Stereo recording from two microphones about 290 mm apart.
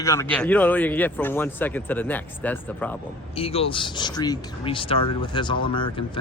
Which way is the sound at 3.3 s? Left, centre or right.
Centre.